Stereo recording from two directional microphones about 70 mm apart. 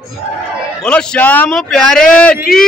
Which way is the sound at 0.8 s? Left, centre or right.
Centre.